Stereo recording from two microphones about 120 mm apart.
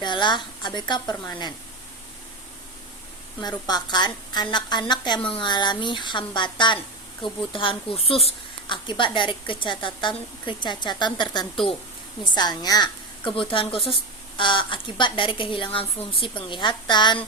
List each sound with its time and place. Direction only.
0.0 s a woman's voice: 40° left (ahead or behind)
3.4 s a woman's voice: 35° left (ahead or behind); by 8.3 s 55° left (ahead or behind)
8.7 s a woman's voice: 45° left (ahead or behind)